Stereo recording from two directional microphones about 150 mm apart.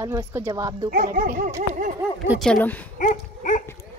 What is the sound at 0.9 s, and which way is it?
Speech, 60° right (ahead or behind).